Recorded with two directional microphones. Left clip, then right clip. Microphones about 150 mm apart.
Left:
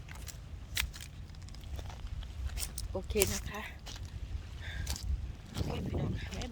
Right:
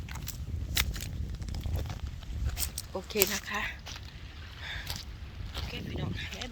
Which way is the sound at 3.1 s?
55° right (ahead or behind).